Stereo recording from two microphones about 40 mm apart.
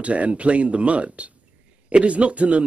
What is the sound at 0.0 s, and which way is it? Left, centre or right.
Speech, right.